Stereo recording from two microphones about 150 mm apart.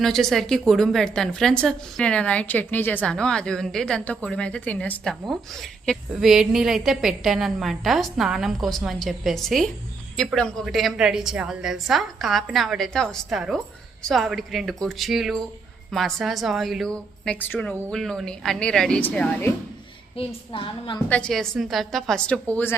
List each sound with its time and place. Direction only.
0.0 s a woman's voice: centre (ahead or behind)
20.1 s a woman's voice: 35° left (ahead or behind)
21.1 s a woman's voice: 5° left (ahead or behind)